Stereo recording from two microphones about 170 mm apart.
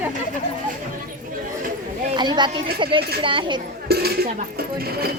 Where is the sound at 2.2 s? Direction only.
25° right (ahead or behind).